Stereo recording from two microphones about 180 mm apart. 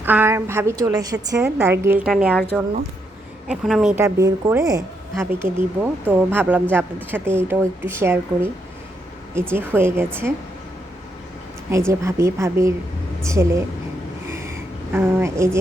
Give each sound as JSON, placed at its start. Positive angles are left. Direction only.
{"t": 0.0, "sound": "speech", "side_deg": -10}
{"t": 3.5, "sound": "a woman's voice", "side_deg": -5}
{"t": 4.0, "sound": "speech", "side_deg": -15}
{"t": 11.7, "sound": "speech", "side_deg": -15}
{"t": 14.3, "sound": "a sound", "side_deg": -15}